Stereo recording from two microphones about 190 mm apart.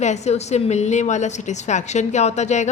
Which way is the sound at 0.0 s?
35° left (ahead or behind).